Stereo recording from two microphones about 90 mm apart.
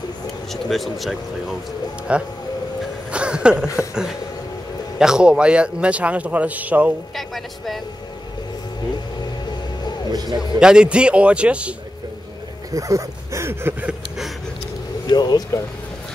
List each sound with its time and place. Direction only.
0.5 s speech: centre (ahead or behind)
2.1 s a man's voice: 10° right (ahead or behind)
3.1 s a sound: 10° right (ahead or behind)
4.9 s a man's voice: 5° right (ahead or behind)
7.2 s a woman's voice: centre (ahead or behind)
10.1 s a man's voice: 50° right (ahead or behind)
10.6 s a man's voice: 10° right (ahead or behind)
12.7 s speech: 35° right (ahead or behind)
13.8 s a sound: 5° right (ahead or behind)
15.0 s speech: 50° left (ahead or behind)